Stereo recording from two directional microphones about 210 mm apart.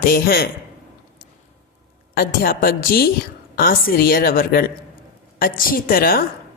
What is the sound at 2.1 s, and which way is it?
A woman's voice, 45° left (ahead or behind).